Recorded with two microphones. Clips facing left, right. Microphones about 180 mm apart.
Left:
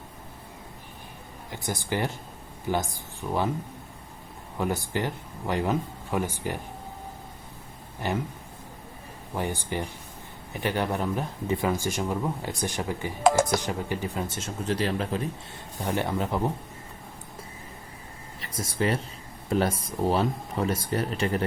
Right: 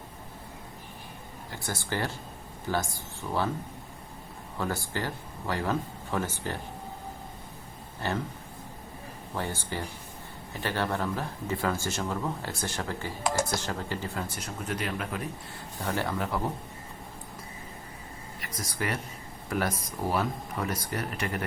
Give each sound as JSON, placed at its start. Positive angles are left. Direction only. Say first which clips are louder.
{"t": 1.5, "sound": "speech", "louder": "left 4 dB", "side_deg": 15}
{"t": 4.5, "sound": "speech", "louder": "left 4 dB", "side_deg": 15}
{"t": 8.0, "sound": "speech", "louder": "left 2 dB", "side_deg": 15}
{"t": 9.3, "sound": "speech", "louder": "left 4 dB", "side_deg": 15}
{"t": 13.2, "sound": "speech", "louder": "left 8 dB", "side_deg": 90}
{"t": 13.6, "sound": "speech", "louder": "left 3 dB", "side_deg": 15}
{"t": 15.8, "sound": "speech", "louder": "left 3 dB", "side_deg": 20}
{"t": 18.3, "sound": "speech", "louder": "left 6 dB", "side_deg": 25}